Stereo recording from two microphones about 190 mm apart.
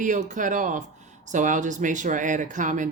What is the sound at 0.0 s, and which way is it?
Speech, 40° right (ahead or behind).